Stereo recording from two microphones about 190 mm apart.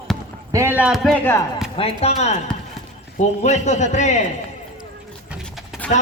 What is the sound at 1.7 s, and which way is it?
A man's voice, 30° left (ahead or behind).